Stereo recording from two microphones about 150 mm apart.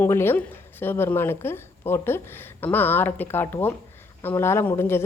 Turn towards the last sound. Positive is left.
turn(degrees=15)  # may be behind; listen again after turning